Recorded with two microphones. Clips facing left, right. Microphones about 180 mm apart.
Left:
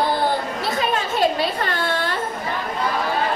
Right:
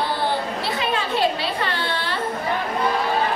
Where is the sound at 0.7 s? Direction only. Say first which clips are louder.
Left 1 dB; 45° left (ahead or behind).